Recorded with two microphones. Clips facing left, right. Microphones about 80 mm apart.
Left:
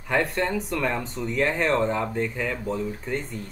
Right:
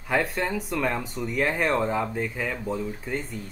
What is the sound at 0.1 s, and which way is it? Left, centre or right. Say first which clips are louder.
Speech: left 1 dB; centre.